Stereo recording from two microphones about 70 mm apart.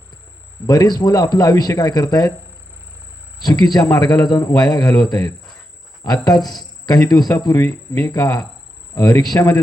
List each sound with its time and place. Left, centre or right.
0.7 s speech: left
3.4 s a man's voice: left
6.1 s speech: left
6.4 s cricket: centre
6.8 s speech: left